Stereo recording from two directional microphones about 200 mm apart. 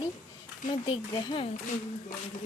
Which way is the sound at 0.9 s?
25° left (ahead or behind).